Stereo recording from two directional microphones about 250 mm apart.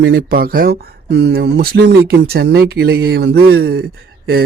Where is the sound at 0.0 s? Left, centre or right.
Right.